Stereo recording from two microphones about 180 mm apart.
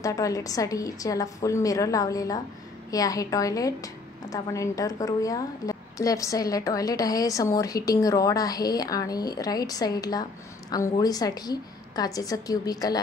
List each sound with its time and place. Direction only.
0.0 s a woman's voice: 20° left (ahead or behind)